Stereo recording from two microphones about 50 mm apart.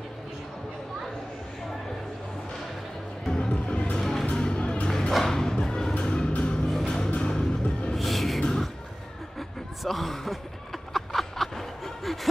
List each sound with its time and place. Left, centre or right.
3.3 s music: centre
4.0 s music: centre
4.3 s music: left
5.1 s a sound: centre
5.9 s music: left
7.9 s music: centre
8.4 s a sound: centre
9.8 s speech: centre
10.9 s a sound: centre